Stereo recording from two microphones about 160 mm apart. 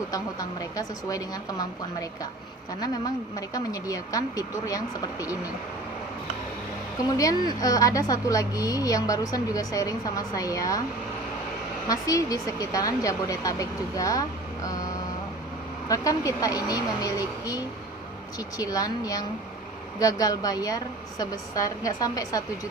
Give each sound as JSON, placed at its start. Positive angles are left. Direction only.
{"t": 0.1, "sound": "a woman's voice", "side_deg": 20}
{"t": 7.1, "sound": "a woman's voice", "side_deg": 20}
{"t": 11.9, "sound": "a woman's voice", "side_deg": 20}
{"t": 15.9, "sound": "a woman's voice", "side_deg": 20}